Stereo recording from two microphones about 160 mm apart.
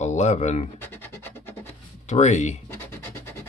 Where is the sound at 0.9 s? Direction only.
15° left (ahead or behind).